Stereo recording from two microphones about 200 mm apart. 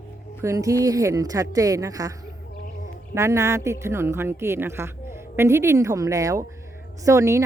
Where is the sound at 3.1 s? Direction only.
15° right (ahead or behind).